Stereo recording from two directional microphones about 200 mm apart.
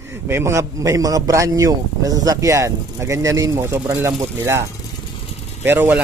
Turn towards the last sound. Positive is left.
turn(degrees=-10)  # may be behind; listen again after turning